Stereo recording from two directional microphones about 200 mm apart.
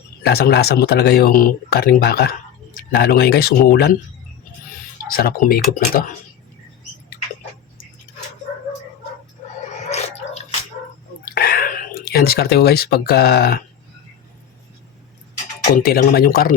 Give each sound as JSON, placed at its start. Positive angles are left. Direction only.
{"t": 0.2, "sound": "speech", "side_deg": 50}
{"t": 5.0, "sound": "speech", "side_deg": 50}
{"t": 9.9, "sound": "dog", "side_deg": 35}
{"t": 11.3, "sound": "speech", "side_deg": 50}
{"t": 15.7, "sound": "speech", "side_deg": 50}